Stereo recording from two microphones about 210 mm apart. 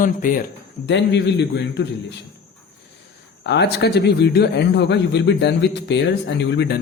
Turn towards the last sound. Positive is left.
turn(degrees=55)  # may be behind; listen again after turning